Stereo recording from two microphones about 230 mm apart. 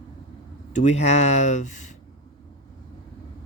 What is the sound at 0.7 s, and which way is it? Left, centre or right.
Speech, left.